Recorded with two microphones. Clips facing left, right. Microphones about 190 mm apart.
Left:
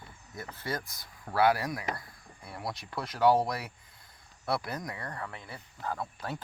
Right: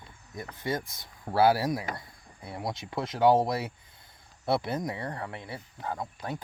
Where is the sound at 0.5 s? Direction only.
20° right (ahead or behind).